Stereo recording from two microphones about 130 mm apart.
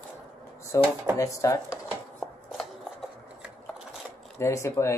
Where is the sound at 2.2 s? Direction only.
5° left (ahead or behind).